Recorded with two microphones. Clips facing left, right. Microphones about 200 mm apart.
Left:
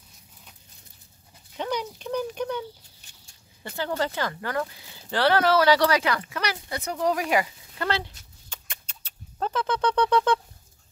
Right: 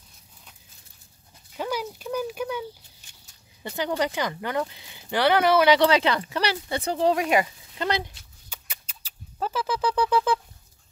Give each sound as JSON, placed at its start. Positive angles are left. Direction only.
{"t": 1.6, "sound": "a sound", "side_deg": -5}
{"t": 3.6, "sound": "speech", "side_deg": -15}
{"t": 8.5, "sound": "rodents", "side_deg": -5}